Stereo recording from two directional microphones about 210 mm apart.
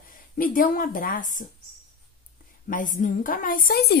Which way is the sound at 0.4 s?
40° left (ahead or behind).